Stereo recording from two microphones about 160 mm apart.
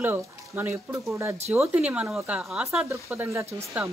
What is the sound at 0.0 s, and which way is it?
Speech, 10° right (ahead or behind).